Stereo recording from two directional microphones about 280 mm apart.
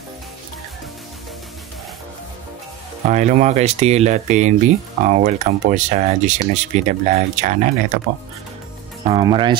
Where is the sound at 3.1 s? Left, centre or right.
Right.